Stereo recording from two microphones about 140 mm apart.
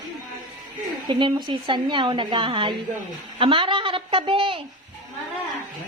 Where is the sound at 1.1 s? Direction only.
35° right (ahead or behind).